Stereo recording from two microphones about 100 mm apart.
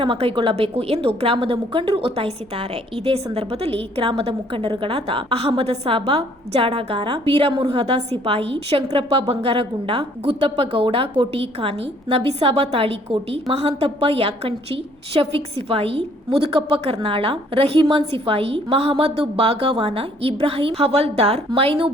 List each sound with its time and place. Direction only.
0.0 s a woman's voice: 60° right (ahead or behind)